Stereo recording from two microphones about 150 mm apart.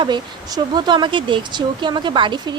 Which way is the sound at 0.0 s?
30° right (ahead or behind).